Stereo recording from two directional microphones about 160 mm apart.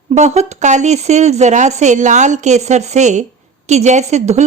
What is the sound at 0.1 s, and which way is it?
A woman's voice, 45° right (ahead or behind).